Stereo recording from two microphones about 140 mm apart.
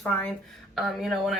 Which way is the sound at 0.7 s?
Centre (ahead or behind).